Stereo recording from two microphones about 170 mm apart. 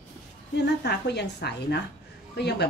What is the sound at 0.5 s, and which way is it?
A woman's voice, 80° left.